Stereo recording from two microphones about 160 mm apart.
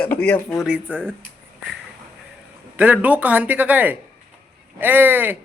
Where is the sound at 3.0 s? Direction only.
10° right (ahead or behind).